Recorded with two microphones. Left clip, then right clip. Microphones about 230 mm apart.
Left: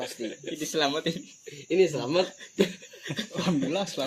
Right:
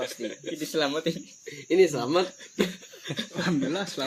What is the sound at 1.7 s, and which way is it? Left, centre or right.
Speech, right.